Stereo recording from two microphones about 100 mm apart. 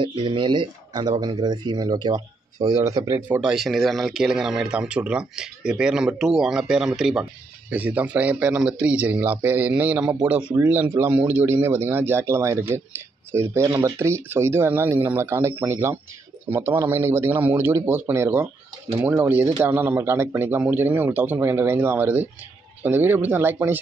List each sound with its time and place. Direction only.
0.0 s speech: 55° right (ahead or behind); by 3.2 s 35° right (ahead or behind)
3.2 s speech: 15° right (ahead or behind)
7.7 s speech: 15° right (ahead or behind)